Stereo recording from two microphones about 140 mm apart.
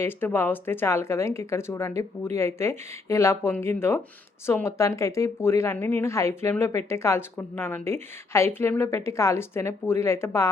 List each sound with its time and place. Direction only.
0.0 s a woman's voice: 15° left (ahead or behind)